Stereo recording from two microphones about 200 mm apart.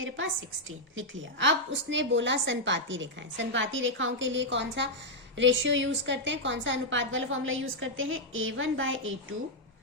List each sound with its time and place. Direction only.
0.9 s a woman's voice: 65° right (ahead or behind)